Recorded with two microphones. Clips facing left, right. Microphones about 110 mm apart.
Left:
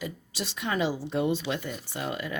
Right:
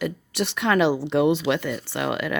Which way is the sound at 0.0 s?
65° right (ahead or behind).